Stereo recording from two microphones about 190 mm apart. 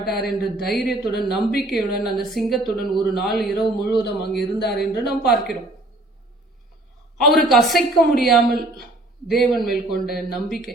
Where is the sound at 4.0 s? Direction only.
60° left (ahead or behind).